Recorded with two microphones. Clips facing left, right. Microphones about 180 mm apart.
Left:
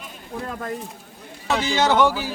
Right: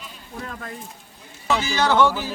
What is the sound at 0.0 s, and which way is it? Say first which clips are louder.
Sheep: left 4 dB; 45° left (ahead or behind).